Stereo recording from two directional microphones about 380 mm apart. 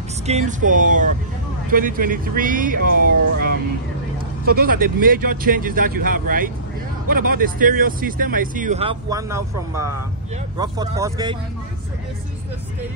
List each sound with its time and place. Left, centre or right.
0.3 s speech: centre